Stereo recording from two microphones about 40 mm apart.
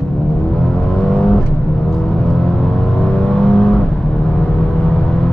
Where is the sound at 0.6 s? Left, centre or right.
Left.